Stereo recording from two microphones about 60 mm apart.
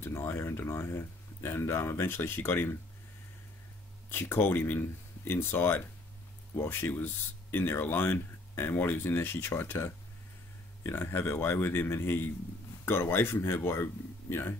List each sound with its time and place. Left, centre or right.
0.0 s speech: left
4.1 s speech: left